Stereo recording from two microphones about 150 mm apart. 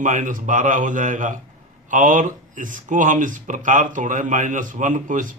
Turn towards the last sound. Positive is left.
turn(degrees=-60)  # may be behind; listen again after turning